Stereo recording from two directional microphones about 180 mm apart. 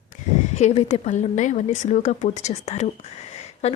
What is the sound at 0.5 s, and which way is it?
A woman's voice, 35° left (ahead or behind).